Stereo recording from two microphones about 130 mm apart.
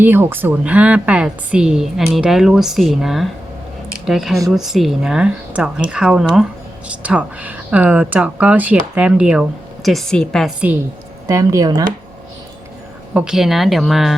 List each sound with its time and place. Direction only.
0.0 s speech: 15° right (ahead or behind); by 10.5 s 5° left (ahead or behind)
11.3 s speech: 25° right (ahead or behind)
13.1 s speech: 5° right (ahead or behind)